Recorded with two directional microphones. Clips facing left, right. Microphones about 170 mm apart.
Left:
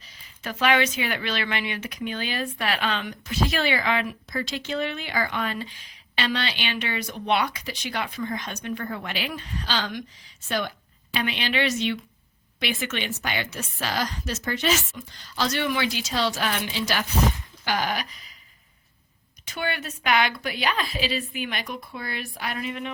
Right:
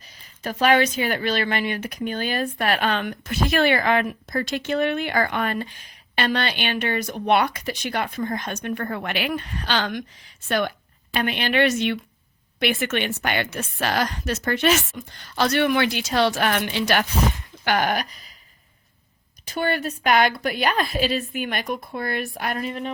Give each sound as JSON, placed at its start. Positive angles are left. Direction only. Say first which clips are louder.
{"t": 0.4, "sound": "speech", "louder": "right 4 dB", "side_deg": -40}
{"t": 11.1, "sound": "a woman's voice", "louder": "right 4 dB", "side_deg": -50}
{"t": 19.5, "sound": "speech", "louder": "right 6 dB", "side_deg": -40}